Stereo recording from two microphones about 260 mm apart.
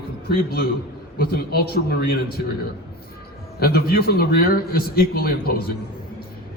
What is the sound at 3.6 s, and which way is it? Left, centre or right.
A man's voice, left.